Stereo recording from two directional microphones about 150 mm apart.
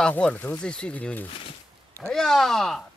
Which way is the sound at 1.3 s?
40° left (ahead or behind).